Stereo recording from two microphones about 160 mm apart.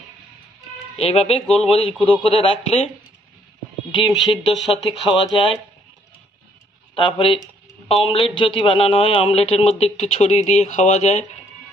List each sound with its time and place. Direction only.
0.9 s a man's voice: 35° left (ahead or behind)
4.0 s a man's voice: 30° left (ahead or behind)
7.0 s a man's voice: 30° left (ahead or behind)